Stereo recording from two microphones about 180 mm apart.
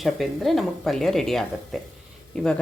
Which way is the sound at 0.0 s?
Centre (ahead or behind).